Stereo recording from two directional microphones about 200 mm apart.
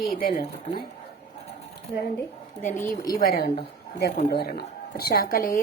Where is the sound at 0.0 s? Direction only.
45° left (ahead or behind).